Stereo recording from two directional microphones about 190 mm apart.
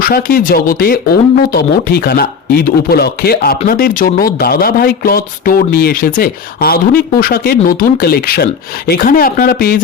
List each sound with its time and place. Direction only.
0.0 s speech: 50° left (ahead or behind)